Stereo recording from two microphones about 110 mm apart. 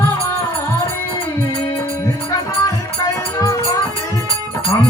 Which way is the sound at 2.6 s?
35° left (ahead or behind).